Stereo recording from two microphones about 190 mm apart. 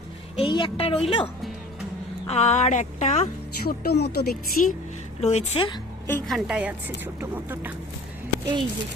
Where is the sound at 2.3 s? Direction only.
35° left (ahead or behind).